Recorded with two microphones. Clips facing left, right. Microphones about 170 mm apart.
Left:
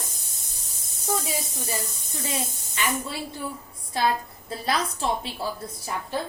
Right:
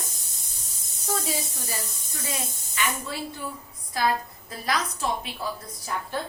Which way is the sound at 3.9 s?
30° left (ahead or behind).